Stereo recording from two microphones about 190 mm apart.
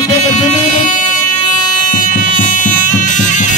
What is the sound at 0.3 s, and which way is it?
Music, 40° left (ahead or behind).